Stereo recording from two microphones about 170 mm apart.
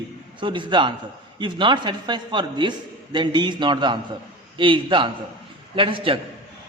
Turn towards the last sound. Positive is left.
turn(degrees=-30)  # may be behind; listen again after turning